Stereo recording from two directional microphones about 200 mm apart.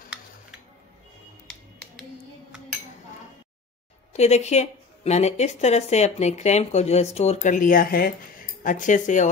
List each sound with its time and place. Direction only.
4.1 s a woman's voice: 35° left (ahead or behind)